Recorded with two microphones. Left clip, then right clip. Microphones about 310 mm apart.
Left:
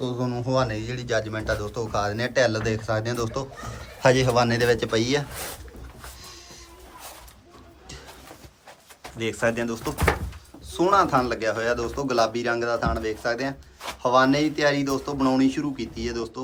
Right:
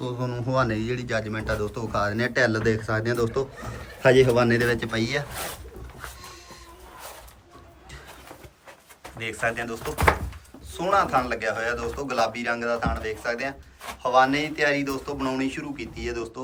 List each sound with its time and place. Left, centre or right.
0.0 s a man's voice: centre
9.1 s a man's voice: centre